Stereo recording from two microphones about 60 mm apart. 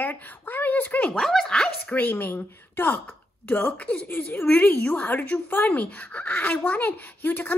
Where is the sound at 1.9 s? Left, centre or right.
Left.